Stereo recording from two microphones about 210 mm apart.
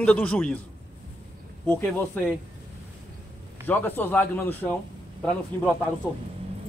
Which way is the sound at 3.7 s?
10° left (ahead or behind).